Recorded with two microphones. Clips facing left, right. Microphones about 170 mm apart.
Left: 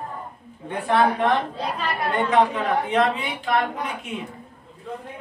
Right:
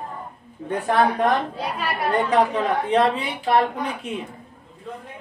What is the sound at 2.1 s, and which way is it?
A woman's voice, 35° right (ahead or behind).